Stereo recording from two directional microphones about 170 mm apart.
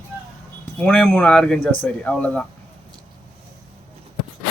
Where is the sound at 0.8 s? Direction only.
5° left (ahead or behind).